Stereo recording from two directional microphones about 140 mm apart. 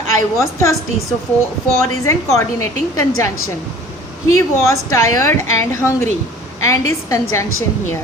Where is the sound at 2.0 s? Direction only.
20° left (ahead or behind).